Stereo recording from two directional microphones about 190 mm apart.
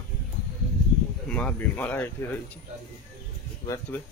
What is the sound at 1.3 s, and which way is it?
Speech, 5° left (ahead or behind).